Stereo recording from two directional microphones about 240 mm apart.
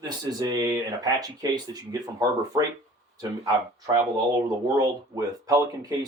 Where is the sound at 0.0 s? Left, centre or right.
Centre.